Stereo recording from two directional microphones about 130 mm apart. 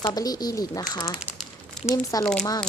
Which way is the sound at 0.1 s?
30° left (ahead or behind).